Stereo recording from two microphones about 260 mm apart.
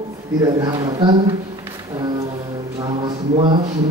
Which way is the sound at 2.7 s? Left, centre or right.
Centre.